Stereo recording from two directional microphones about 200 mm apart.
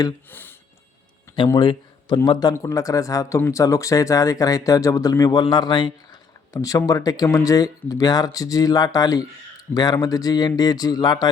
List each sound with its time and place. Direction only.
0.0 s speech: 10° left (ahead or behind)
1.4 s speech: 25° left (ahead or behind)